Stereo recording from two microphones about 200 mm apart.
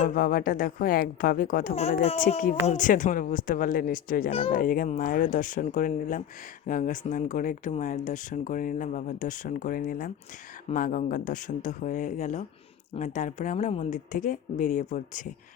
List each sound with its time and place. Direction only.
0.0 s speech: 45° left (ahead or behind)
4.3 s speech: 25° left (ahead or behind)
4.5 s speech: 45° left (ahead or behind)